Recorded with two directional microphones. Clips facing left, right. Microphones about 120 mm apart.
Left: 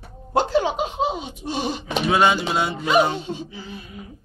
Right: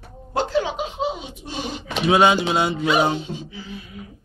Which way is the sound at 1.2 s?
40° left (ahead or behind).